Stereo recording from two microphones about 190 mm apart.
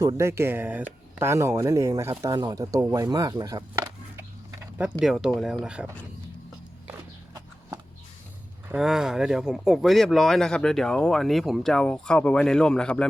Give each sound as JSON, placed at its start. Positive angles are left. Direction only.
{"t": 0.0, "sound": "speech", "side_deg": -15}
{"t": 4.2, "sound": "a sound", "side_deg": -10}
{"t": 4.9, "sound": "speech", "side_deg": 0}
{"t": 8.7, "sound": "speech", "side_deg": -5}